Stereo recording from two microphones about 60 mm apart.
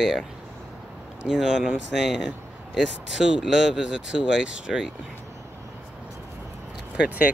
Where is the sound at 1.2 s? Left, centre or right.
Centre.